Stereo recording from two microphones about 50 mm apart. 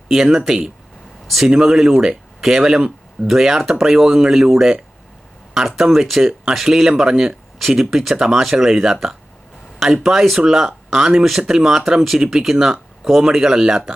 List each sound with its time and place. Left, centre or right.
0.1 s speech: centre